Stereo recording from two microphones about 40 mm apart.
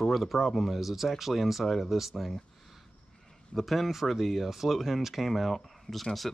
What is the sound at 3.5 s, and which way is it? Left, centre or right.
Speech, centre.